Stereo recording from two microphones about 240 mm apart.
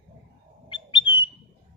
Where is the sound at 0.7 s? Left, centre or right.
Centre.